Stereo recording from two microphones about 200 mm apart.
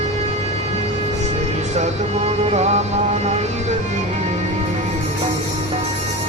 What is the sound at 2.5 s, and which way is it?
Music, 35° right (ahead or behind).